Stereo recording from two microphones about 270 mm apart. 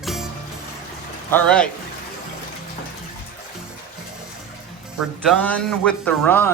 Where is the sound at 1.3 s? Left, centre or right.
Centre.